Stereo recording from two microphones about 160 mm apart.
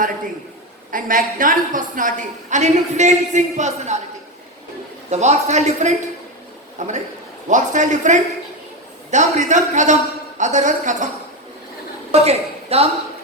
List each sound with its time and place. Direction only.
0.9 s a woman's voice: 60° right (ahead or behind)
5.1 s a woman's voice: 45° right (ahead or behind)
12.1 s a woman's voice: 40° right (ahead or behind)